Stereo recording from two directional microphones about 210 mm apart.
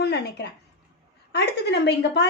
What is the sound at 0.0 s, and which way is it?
A woman's voice, 50° left (ahead or behind).